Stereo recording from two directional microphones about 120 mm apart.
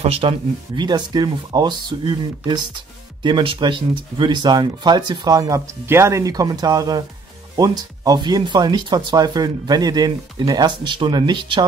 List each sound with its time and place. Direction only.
0.0 s speech: 55° right (ahead or behind); by 11.6 s 40° right (ahead or behind)